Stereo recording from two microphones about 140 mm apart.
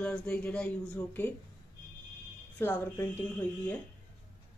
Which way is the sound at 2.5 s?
10° left (ahead or behind).